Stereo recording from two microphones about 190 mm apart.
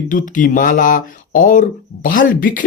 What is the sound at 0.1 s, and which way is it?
Speech, 45° left (ahead or behind).